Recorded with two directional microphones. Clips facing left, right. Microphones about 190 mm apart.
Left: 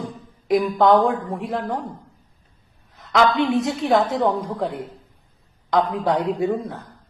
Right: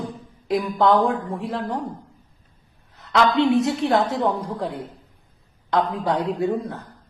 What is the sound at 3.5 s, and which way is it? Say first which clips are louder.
A man's voice: even; 20° left (ahead or behind).